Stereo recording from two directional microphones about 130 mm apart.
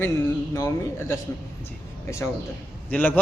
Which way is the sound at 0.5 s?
20° left (ahead or behind).